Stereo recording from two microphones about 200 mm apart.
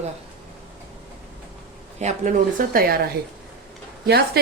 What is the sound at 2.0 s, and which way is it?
Speech, 35° right (ahead or behind).